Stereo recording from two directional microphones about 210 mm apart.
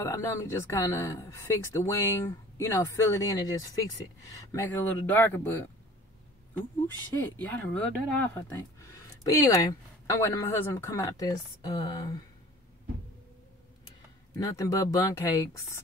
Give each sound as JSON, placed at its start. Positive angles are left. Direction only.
{"t": 0.0, "sound": "speech", "side_deg": 15}
{"t": 7.3, "sound": "speech", "side_deg": 5}
{"t": 14.3, "sound": "speech", "side_deg": 15}